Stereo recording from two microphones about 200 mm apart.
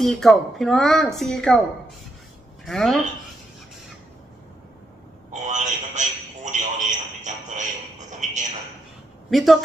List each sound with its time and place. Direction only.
0.0 s speech: centre (ahead or behind)
2.6 s speech: centre (ahead or behind)
5.3 s a sound: 35° right (ahead or behind)
9.3 s speech: centre (ahead or behind)